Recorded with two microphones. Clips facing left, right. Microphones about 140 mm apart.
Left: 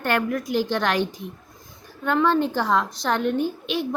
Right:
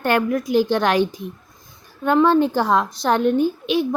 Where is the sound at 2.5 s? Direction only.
45° right (ahead or behind).